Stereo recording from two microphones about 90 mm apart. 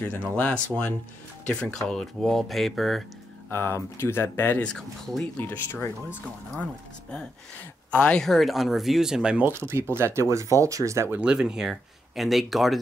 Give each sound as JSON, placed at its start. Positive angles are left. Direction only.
{"t": 0.4, "sound": "speech", "side_deg": 15}
{"t": 3.4, "sound": "speech", "side_deg": 25}
{"t": 5.5, "sound": "speech", "side_deg": 25}
{"t": 6.2, "sound": "speech", "side_deg": 10}
{"t": 9.5, "sound": "speech", "side_deg": -30}
{"t": 11.1, "sound": "speech", "side_deg": -10}